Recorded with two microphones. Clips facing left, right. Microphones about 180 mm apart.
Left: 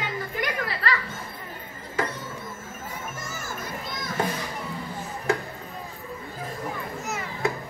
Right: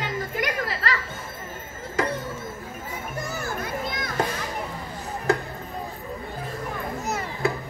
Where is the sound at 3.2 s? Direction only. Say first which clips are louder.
Right 5 dB; 60° right (ahead or behind).